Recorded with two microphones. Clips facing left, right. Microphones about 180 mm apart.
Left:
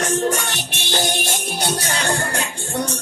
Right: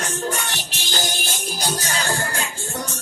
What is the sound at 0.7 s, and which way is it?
Music, 60° left (ahead or behind).